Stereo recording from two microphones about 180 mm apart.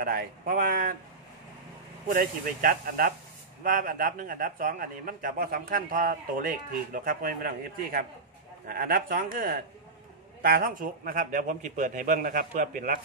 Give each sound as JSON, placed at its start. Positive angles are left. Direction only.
{"t": 0.0, "sound": "a man's voice", "side_deg": -55}
{"t": 2.0, "sound": "a man's voice", "side_deg": -50}